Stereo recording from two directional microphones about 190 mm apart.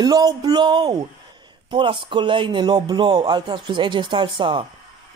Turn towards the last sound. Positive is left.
turn(degrees=-25)  # may be behind; listen again after turning